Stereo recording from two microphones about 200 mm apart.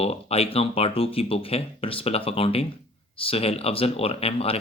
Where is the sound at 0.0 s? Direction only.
30° left (ahead or behind).